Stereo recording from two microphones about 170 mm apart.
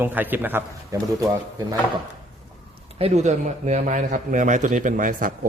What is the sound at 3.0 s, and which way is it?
A man's voice, 45° right (ahead or behind).